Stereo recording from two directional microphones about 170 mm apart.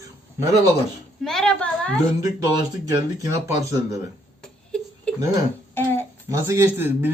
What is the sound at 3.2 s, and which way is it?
Speech, 20° right (ahead or behind).